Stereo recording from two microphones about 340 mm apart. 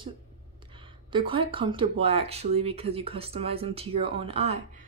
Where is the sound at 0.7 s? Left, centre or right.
Centre.